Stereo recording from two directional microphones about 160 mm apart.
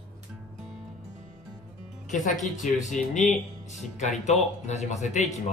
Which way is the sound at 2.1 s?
50° left (ahead or behind).